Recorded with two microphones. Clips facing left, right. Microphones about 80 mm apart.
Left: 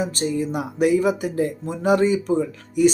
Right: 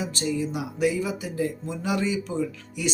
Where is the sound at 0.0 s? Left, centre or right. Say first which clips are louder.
Left 4 dB; left.